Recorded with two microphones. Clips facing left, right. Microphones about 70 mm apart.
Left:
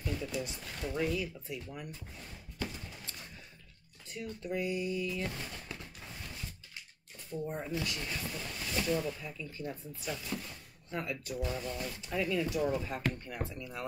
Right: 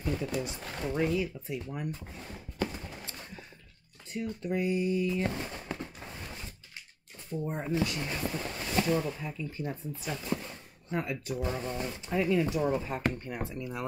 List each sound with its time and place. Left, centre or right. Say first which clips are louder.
0.0 s a sound: right 4 dB; right
0.7 s speech: right 4 dB; right
4.2 s speech: right 5 dB; right
7.4 s speech: right 6 dB; right